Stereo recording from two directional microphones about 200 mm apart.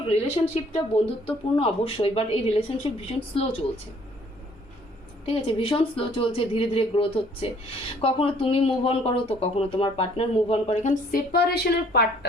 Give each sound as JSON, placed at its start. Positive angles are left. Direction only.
{"t": 0.1, "sound": "speech", "side_deg": 30}
{"t": 5.2, "sound": "speech", "side_deg": 25}
{"t": 11.1, "sound": "a woman's voice", "side_deg": 50}